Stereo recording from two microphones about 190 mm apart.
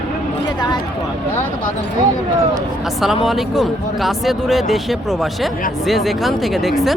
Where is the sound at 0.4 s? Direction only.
20° left (ahead or behind).